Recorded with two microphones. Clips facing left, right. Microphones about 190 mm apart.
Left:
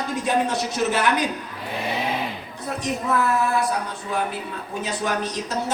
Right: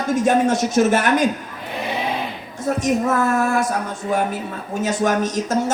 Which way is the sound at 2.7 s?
45° right (ahead or behind).